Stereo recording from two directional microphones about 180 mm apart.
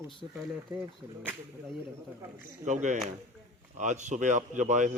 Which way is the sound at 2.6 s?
40° right (ahead or behind).